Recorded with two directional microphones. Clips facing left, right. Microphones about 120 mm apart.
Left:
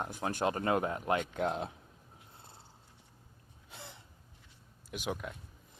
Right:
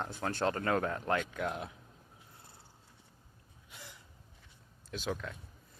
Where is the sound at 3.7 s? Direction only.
25° left (ahead or behind).